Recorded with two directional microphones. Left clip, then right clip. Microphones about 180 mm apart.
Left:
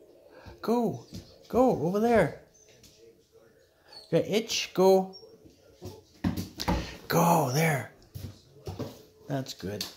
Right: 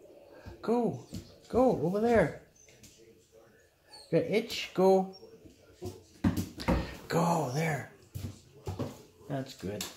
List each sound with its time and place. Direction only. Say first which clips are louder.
0.6 s speech: left 2 dB; 25° left (ahead or behind)
4.1 s speech: left 2 dB; 25° left (ahead or behind)
6.5 s a sound: left 1 dB; 30° left (ahead or behind)
9.3 s speech: left 3 dB; 30° left (ahead or behind)